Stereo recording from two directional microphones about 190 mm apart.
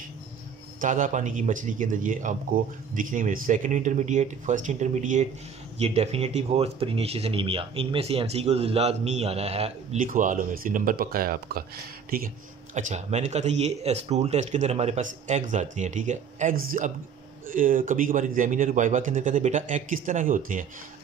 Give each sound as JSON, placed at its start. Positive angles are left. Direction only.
{"t": 0.7, "sound": "a man's voice", "side_deg": -40}
{"t": 9.9, "sound": "a man's voice", "side_deg": -45}
{"t": 12.7, "sound": "a man's voice", "side_deg": -40}